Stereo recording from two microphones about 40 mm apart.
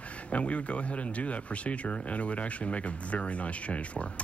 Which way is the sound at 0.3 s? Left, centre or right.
Left.